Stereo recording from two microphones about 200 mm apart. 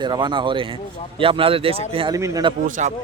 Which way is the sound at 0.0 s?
20° right (ahead or behind).